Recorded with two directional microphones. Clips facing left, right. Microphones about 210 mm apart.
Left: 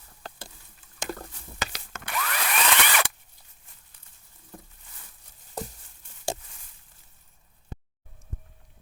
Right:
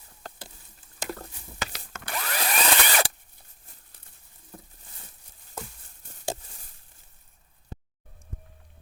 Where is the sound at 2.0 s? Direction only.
35° right (ahead or behind).